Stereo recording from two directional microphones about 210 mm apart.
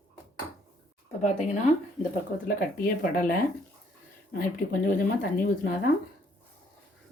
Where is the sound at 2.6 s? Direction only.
40° left (ahead or behind).